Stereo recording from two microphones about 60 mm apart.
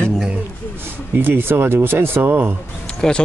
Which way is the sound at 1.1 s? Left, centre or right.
Right.